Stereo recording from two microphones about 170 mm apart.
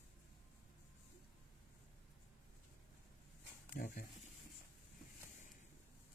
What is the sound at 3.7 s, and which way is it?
Speech, 50° left (ahead or behind).